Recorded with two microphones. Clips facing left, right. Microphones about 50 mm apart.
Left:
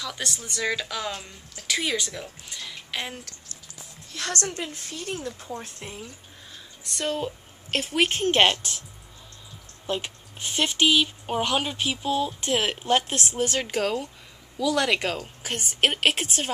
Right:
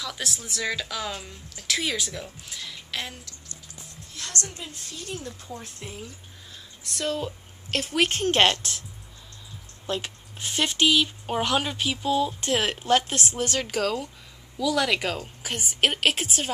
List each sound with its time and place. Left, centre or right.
0.0 s a woman's voice: centre
2.7 s a sound: centre
4.2 s a woman's voice: left
5.6 s a woman's voice: centre
9.8 s speech: centre
11.4 s speech: left
12.3 s a woman's voice: centre